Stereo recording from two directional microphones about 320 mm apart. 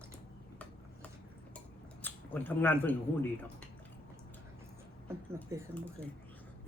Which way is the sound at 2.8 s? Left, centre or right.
Centre.